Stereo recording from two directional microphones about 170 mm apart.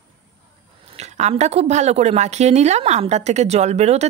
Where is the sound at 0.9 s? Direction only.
40° right (ahead or behind).